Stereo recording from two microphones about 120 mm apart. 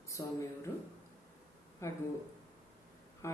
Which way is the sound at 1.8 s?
25° left (ahead or behind).